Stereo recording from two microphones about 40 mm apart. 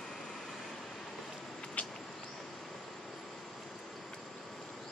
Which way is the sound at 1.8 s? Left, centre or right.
Left.